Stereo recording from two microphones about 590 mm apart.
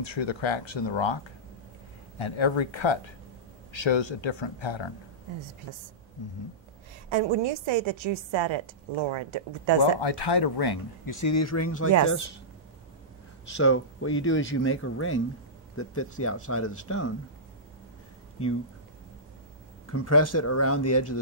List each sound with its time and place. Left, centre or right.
0.0 s speech: left
7.1 s a woman's voice: right
9.8 s speech: left
13.5 s speech: centre
19.9 s speech: left